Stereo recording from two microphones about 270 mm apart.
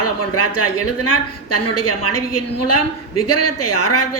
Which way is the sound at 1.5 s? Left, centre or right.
Left.